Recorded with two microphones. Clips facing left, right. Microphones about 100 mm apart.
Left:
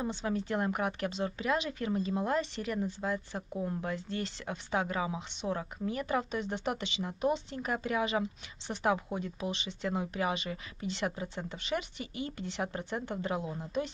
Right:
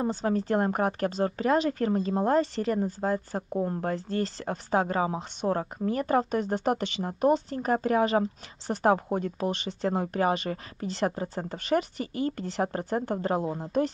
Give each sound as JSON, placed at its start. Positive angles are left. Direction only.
{"t": 0.0, "sound": "a woman's voice", "side_deg": -40}